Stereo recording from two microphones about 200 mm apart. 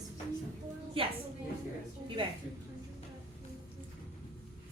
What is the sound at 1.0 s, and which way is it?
Speech, 25° right (ahead or behind).